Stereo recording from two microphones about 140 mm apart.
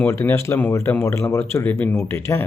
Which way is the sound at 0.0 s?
15° left (ahead or behind).